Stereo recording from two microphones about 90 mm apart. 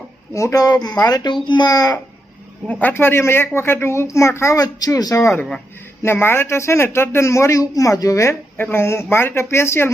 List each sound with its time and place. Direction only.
0.3 s a child's voice: 35° left (ahead or behind)
2.8 s a woman's voice: 25° left (ahead or behind)